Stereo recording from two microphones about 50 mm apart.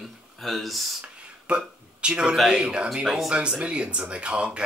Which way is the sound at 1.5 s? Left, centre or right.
Centre.